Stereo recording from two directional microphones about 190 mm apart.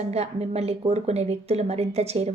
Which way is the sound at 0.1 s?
35° right (ahead or behind).